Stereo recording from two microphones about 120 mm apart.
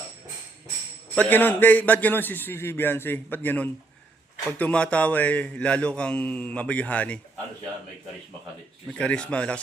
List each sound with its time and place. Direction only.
1.1 s a man's voice: 15° left (ahead or behind)
8.9 s a man's voice: 10° left (ahead or behind)